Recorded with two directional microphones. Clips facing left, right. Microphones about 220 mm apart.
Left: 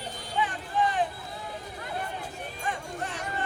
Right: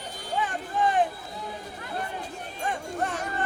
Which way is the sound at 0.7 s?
45° right (ahead or behind).